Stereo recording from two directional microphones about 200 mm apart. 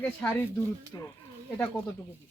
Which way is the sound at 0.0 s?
10° left (ahead or behind).